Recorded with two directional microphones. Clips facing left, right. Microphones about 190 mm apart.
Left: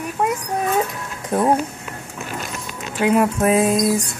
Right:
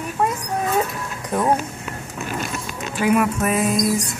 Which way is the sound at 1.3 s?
30° left (ahead or behind).